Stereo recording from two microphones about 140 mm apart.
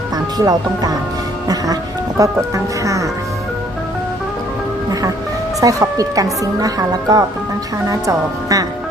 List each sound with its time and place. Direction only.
0.3 s music: 25° right (ahead or behind)
1.5 s speech: 25° right (ahead or behind)
2.8 s music: 25° right (ahead or behind)
5.5 s music: 25° right (ahead or behind)